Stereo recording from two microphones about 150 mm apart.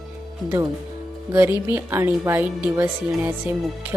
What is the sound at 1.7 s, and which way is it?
Speech, 15° right (ahead or behind).